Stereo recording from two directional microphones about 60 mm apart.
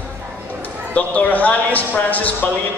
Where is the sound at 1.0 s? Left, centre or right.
Left.